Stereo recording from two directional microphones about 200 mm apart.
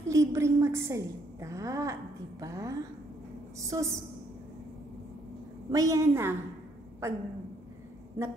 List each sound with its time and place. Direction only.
0.1 s a woman's voice: 15° right (ahead or behind)
5.7 s a woman's voice: 15° right (ahead or behind)